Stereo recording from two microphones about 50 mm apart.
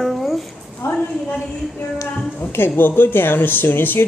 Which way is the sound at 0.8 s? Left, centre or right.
Left.